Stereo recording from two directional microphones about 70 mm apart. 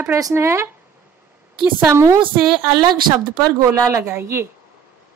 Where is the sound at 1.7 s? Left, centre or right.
Right.